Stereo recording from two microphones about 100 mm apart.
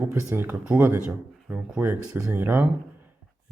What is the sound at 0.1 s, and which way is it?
Speech, 25° right (ahead or behind).